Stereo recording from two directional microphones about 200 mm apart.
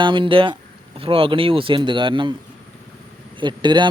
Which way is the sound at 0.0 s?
25° right (ahead or behind).